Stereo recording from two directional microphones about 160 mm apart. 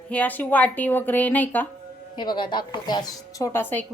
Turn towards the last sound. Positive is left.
turn(degrees=10)  # may be behind; listen again after turning